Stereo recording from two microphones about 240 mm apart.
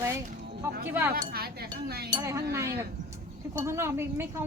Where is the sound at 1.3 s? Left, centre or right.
Right.